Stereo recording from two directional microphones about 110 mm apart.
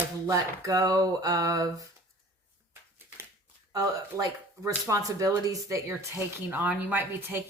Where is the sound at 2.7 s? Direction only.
20° right (ahead or behind).